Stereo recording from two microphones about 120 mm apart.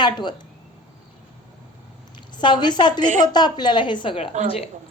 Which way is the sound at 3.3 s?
35° left (ahead or behind).